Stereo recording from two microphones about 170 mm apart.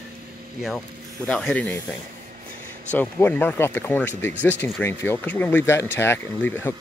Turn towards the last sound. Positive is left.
turn(degrees=10)  # may be behind; listen again after turning